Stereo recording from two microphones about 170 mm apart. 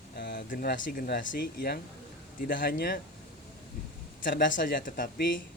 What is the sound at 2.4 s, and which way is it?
Speech, 55° left (ahead or behind).